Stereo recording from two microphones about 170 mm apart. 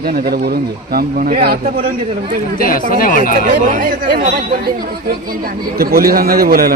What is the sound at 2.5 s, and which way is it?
Speech, 55° left (ahead or behind).